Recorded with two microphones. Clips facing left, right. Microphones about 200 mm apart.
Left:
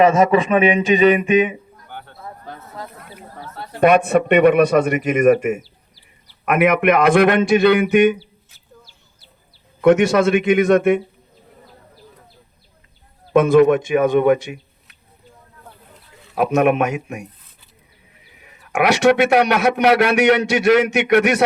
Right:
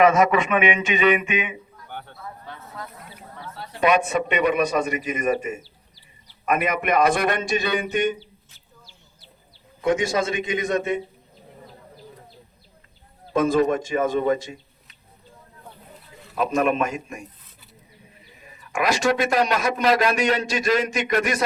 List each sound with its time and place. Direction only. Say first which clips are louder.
0.0 s a sound: left 4 dB; 30° left (ahead or behind)
3.3 s a man's voice: left 4 dB; 45° left (ahead or behind); by 8.2 s 65° left (ahead or behind)
8.2 s a sound: even; 5° left (ahead or behind)
9.8 s a man's voice: left 9 dB; 70° left (ahead or behind)
13.3 s a man's voice: left 7 dB; 70° left (ahead or behind)
16.3 s a man's voice: left 5 dB; 70° left (ahead or behind)
18.4 s a man's voice: left 6 dB; 70° left (ahead or behind)